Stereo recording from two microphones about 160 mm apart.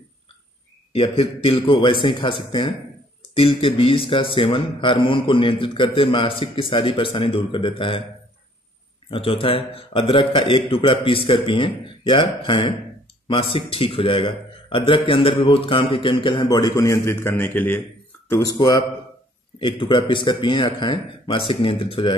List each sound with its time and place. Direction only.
0.9 s speech: 35° left (ahead or behind)
9.1 s speech: 35° left (ahead or behind)